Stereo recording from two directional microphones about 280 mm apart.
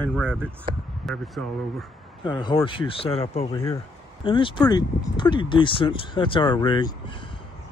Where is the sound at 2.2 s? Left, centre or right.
Centre.